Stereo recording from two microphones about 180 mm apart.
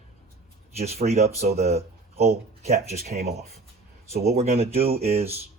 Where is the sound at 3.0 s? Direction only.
60° right (ahead or behind).